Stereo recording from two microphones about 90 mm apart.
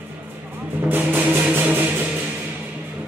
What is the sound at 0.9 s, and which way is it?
Music, 20° right (ahead or behind).